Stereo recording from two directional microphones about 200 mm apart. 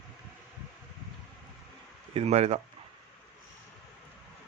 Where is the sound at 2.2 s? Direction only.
30° right (ahead or behind).